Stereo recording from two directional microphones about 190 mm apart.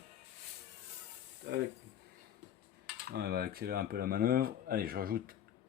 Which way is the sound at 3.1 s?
55° right (ahead or behind).